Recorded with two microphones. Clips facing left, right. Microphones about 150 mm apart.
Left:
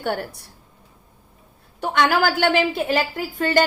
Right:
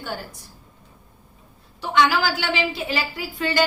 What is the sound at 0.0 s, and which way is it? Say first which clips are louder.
Speech: left 7 dB; 60° left (ahead or behind).